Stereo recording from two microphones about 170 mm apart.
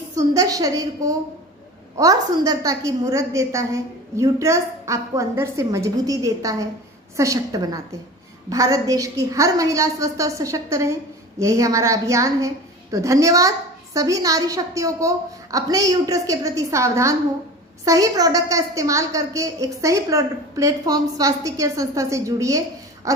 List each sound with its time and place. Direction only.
0.2 s a woman's voice: 20° right (ahead or behind)